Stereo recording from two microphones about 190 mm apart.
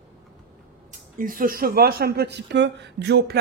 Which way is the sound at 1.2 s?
45° right (ahead or behind).